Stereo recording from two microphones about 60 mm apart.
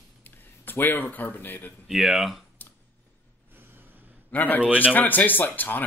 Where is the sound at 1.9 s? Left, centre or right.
Centre.